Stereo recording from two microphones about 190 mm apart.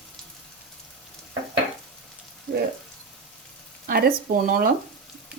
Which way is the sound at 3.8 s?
50° right (ahead or behind).